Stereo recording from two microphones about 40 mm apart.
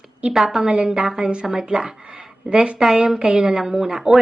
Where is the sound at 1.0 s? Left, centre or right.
Centre.